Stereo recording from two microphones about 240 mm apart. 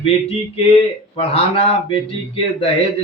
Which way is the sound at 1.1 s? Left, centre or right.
Left.